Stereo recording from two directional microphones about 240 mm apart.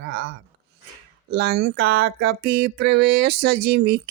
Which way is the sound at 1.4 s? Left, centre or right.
Right.